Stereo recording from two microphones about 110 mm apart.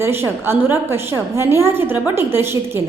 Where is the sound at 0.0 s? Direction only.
20° right (ahead or behind).